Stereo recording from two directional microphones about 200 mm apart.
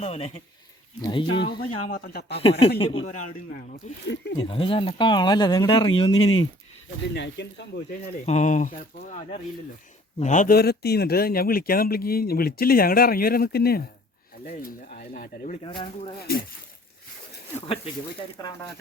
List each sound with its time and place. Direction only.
0.0 s speech: 30° left (ahead or behind)
1.9 s speech: 50° left (ahead or behind)
2.4 s speech: 30° left (ahead or behind)
7.1 s speech: 60° left (ahead or behind)
8.2 s speech: 35° left (ahead or behind)
15.6 s speech: 25° left (ahead or behind)